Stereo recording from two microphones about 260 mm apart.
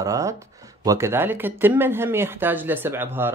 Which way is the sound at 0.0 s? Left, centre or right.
Centre.